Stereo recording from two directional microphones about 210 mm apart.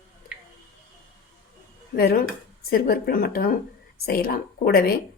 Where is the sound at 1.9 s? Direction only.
45° left (ahead or behind).